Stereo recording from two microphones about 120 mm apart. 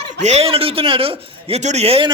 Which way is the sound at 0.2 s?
65° right (ahead or behind).